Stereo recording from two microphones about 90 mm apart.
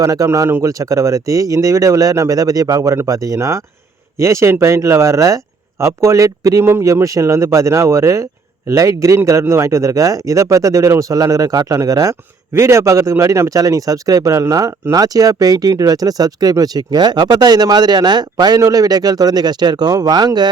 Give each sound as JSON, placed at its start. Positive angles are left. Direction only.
{"t": 0.0, "sound": "speech", "side_deg": -40}